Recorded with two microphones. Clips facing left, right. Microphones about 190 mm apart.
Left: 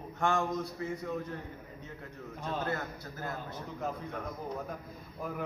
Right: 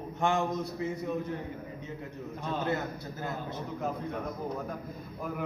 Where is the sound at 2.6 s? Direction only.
20° right (ahead or behind).